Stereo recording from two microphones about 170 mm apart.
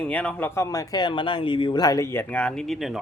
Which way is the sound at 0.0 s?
5° left (ahead or behind).